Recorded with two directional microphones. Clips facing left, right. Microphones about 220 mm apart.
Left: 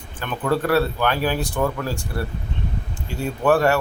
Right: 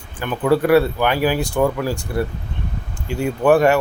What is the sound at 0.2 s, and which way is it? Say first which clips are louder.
Speech: right 5 dB; 10° right (ahead or behind).